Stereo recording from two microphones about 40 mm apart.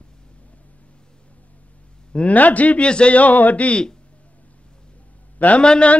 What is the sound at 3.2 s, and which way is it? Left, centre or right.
Speech, left.